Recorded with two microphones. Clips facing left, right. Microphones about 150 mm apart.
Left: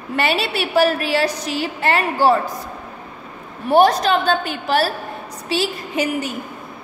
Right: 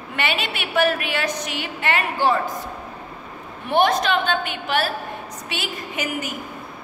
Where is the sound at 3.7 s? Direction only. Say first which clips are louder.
Left 5 dB; 35° left (ahead or behind).